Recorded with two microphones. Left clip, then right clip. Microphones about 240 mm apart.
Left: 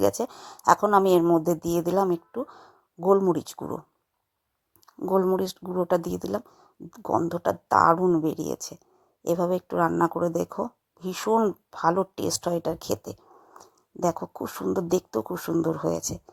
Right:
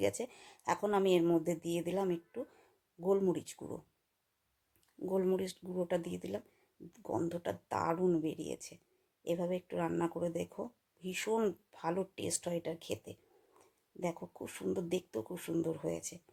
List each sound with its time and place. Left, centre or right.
0.2 s speech: left
5.0 s speech: left